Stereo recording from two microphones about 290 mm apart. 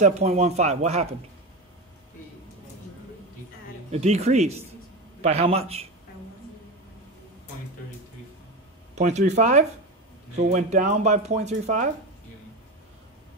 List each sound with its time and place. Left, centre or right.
0.0 s speech: right
3.9 s speech: right
8.9 s speech: right